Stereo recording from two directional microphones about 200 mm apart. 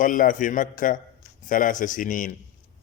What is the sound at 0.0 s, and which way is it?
A man's voice, 45° left (ahead or behind).